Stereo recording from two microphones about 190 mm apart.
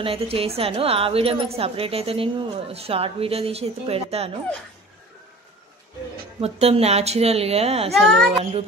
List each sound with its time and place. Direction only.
0.0 s a woman's voice: 30° right (ahead or behind)
6.4 s a woman's voice: 30° right (ahead or behind)
7.9 s a child's voice: centre (ahead or behind)